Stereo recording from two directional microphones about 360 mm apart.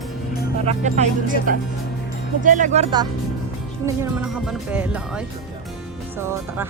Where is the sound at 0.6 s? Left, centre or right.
Centre.